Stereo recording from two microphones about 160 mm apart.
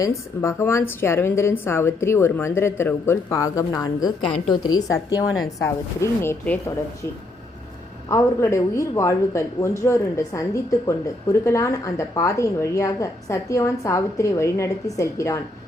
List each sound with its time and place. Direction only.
0.0 s speech: 20° left (ahead or behind)
8.1 s speech: 20° left (ahead or behind)